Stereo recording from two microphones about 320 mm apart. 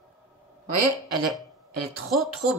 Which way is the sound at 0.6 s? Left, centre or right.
Right.